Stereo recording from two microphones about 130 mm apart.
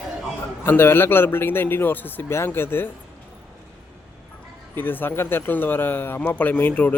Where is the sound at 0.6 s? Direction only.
20° left (ahead or behind).